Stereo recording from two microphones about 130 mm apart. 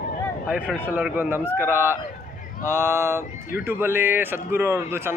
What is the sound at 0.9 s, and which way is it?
A man's voice, 15° right (ahead or behind).